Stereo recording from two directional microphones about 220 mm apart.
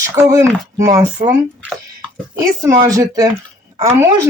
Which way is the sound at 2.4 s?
15° right (ahead or behind).